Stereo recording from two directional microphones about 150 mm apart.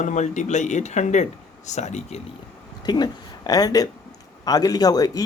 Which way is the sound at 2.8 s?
25° left (ahead or behind).